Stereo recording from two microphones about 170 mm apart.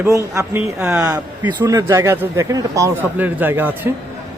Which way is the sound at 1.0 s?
20° right (ahead or behind).